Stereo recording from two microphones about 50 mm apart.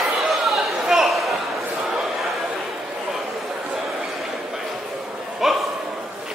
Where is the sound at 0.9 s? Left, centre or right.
Centre.